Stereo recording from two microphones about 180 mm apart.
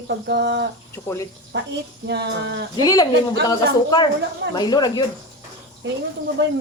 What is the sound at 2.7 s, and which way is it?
Speech, 20° left (ahead or behind).